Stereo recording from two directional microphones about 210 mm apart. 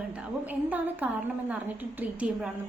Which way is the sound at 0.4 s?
10° right (ahead or behind).